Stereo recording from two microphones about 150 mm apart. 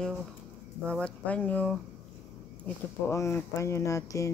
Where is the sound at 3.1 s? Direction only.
20° left (ahead or behind).